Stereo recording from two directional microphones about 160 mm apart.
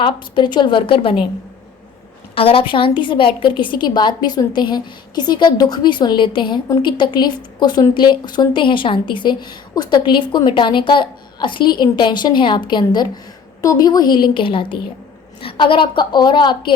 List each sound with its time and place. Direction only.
0.0 s a woman's voice: 30° left (ahead or behind)
2.3 s a woman's voice: 35° left (ahead or behind)